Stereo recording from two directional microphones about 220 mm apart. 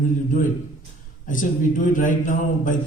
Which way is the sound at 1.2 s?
35° left (ahead or behind).